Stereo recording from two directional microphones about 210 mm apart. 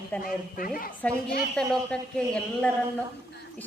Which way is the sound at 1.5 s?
5° left (ahead or behind).